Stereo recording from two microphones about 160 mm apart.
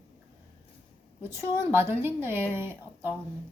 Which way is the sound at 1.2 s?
15° right (ahead or behind).